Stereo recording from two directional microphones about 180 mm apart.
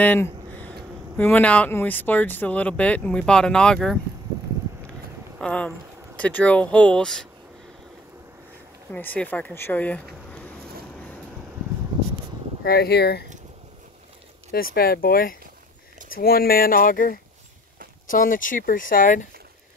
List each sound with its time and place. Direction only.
0.0 s a sound: 10° left (ahead or behind)
1.1 s speech: 10° left (ahead or behind)
5.4 s speech: 5° left (ahead or behind)
8.9 s speech: 10° left (ahead or behind)
12.6 s speech: 60° left (ahead or behind)
14.5 s speech: 55° left (ahead or behind)